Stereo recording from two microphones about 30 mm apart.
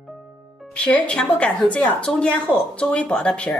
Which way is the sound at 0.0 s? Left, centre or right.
Centre.